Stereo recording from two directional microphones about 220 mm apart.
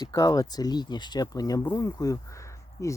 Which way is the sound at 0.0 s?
15° left (ahead or behind).